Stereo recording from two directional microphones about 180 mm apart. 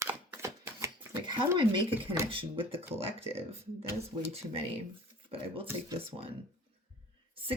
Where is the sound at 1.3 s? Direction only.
25° right (ahead or behind).